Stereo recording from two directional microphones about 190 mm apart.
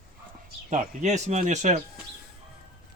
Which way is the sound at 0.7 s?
40° right (ahead or behind).